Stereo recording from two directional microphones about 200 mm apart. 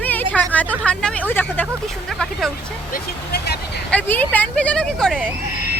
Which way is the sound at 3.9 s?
10° left (ahead or behind).